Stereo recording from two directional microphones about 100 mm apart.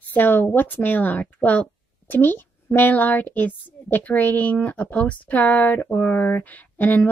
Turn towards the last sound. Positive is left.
turn(degrees=15)  # may be behind; listen again after turning